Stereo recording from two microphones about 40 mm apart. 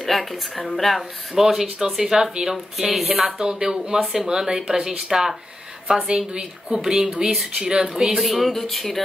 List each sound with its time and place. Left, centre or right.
0.0 s speech: centre
1.3 s speech: centre
3.3 s speech: centre
4.0 s speech: centre
4.3 s a woman's voice: centre
8.2 s speech: centre